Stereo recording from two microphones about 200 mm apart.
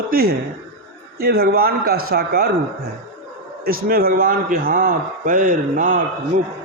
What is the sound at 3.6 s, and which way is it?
A man's voice, 45° right (ahead or behind).